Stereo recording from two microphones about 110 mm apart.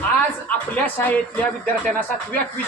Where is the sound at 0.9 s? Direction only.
15° left (ahead or behind).